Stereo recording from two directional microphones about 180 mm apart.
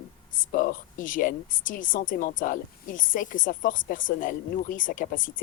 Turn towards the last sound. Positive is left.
turn(degrees=50)  # may be behind; listen again after turning